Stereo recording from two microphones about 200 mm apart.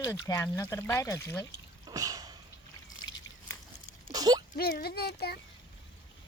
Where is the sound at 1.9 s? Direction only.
20° right (ahead or behind).